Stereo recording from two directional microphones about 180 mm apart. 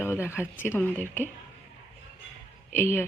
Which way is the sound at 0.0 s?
15° left (ahead or behind).